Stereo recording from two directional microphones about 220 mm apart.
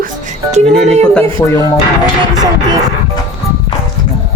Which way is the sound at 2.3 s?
15° right (ahead or behind).